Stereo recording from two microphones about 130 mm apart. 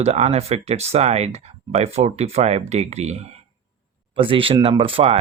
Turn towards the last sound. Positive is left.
turn(degrees=-45)  # may be behind; listen again after turning